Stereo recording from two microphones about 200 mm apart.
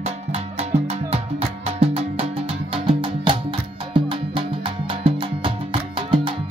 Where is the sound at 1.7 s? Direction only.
30° right (ahead or behind).